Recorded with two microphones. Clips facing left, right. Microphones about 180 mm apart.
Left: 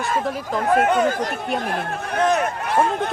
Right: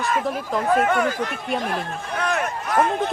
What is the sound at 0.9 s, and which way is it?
Speech, 20° left (ahead or behind).